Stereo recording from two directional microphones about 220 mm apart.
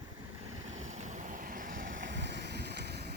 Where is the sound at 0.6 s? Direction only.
60° right (ahead or behind).